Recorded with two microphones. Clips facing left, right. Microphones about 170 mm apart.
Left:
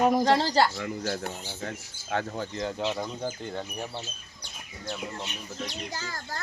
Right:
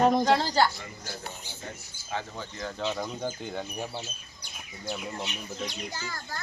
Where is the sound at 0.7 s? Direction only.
75° left (ahead or behind).